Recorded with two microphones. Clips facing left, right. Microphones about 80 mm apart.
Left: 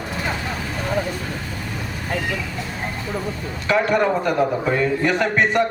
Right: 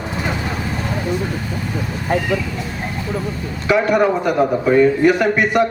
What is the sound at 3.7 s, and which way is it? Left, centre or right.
A man's voice, centre.